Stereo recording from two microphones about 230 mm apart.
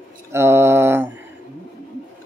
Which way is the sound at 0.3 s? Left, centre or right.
Centre.